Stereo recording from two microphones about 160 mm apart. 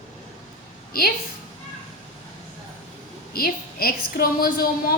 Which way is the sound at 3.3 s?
70° left (ahead or behind).